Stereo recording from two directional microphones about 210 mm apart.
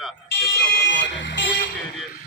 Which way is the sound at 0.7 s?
55° left (ahead or behind).